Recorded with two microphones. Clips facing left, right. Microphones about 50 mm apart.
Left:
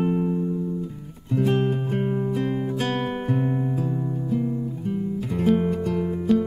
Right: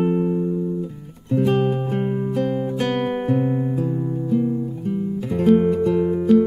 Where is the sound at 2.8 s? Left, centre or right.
Right.